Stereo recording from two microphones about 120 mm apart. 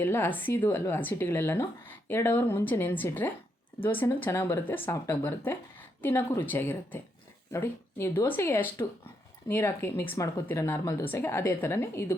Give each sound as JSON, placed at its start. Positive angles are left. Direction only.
{"t": 0.0, "sound": "speech", "side_deg": 20}